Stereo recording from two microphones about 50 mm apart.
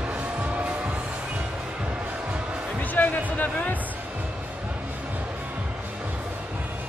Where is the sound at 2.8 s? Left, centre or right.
Left.